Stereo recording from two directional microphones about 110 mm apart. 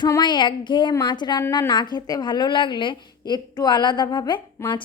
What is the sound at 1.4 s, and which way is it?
A woman's voice, 30° left (ahead or behind).